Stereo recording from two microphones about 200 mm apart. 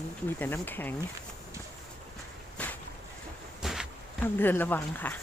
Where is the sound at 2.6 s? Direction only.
5° left (ahead or behind).